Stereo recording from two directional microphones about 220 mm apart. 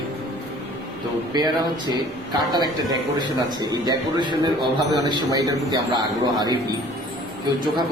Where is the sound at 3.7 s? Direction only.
20° right (ahead or behind).